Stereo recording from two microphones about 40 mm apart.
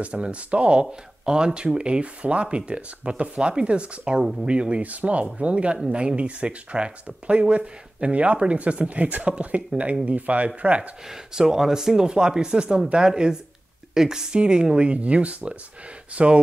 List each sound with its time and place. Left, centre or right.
0.0 s speech: right
11.1 s speech: centre; by 16.3 s right